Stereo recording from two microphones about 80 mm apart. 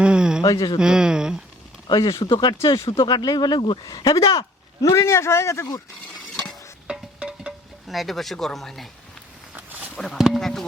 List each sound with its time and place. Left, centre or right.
0.0 s a sound: centre
0.4 s speech: left
0.8 s speech: centre
1.9 s speech: left
2.7 s speech: left
3.1 s speech: left
3.8 s speech: left
6.8 s music: centre
7.9 s speech: centre
9.9 s speech: centre